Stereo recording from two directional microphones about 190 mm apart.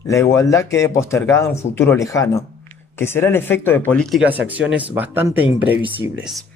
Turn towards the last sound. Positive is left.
turn(degrees=-5)  # may be behind; listen again after turning